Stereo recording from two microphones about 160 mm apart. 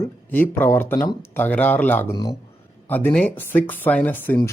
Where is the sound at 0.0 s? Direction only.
10° left (ahead or behind).